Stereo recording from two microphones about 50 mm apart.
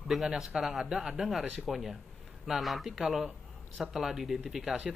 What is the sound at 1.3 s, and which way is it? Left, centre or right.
Speech, centre.